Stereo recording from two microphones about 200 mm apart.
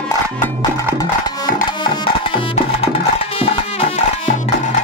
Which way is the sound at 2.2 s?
25° left (ahead or behind).